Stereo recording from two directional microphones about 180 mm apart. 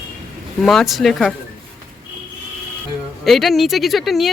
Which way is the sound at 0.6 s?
Centre (ahead or behind).